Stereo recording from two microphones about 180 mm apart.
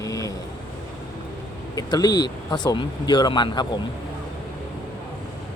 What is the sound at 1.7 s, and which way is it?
Speech, 20° left (ahead or behind).